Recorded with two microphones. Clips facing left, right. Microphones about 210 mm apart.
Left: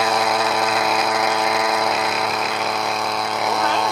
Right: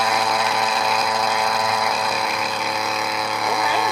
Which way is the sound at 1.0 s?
5° left (ahead or behind).